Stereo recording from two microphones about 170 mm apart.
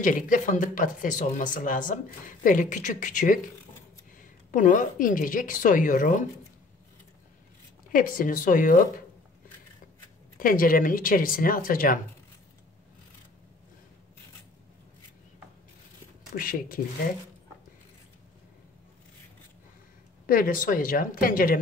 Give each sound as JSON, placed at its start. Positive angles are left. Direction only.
{"t": 0.0, "sound": "a woman's voice", "side_deg": 50}
{"t": 7.9, "sound": "a woman's voice", "side_deg": 55}
{"t": 10.4, "sound": "speech", "side_deg": 55}
{"t": 16.3, "sound": "speech", "side_deg": 55}
{"t": 20.2, "sound": "speech", "side_deg": 55}